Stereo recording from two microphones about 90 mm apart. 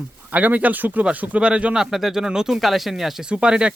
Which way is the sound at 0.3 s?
15° right (ahead or behind).